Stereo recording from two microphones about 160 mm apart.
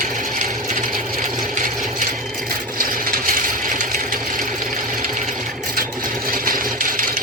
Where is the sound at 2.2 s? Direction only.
Centre (ahead or behind).